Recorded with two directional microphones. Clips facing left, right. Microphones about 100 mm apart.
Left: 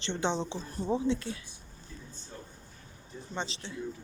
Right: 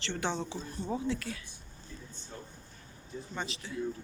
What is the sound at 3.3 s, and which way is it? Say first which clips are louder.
Speech: left 3 dB; 30° left (ahead or behind).